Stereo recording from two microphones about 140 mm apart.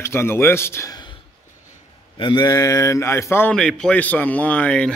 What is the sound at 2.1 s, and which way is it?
A man's voice, 30° left (ahead or behind).